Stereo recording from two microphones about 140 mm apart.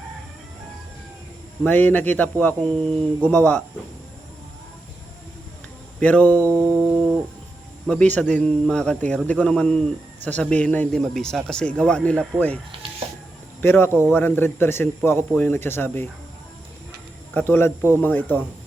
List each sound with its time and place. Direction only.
1.6 s a man's voice: 15° left (ahead or behind)
6.0 s a man's voice: 10° left (ahead or behind)
6.5 s music: 20° right (ahead or behind)
7.9 s a man's voice: 10° left (ahead or behind)
13.6 s a man's voice: 15° left (ahead or behind)
17.3 s a man's voice: 15° left (ahead or behind)